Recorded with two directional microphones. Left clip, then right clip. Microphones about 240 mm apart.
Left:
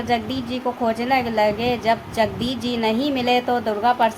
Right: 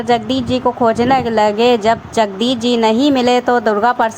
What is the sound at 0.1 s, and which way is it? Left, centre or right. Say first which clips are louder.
Speech: right 9 dB; right.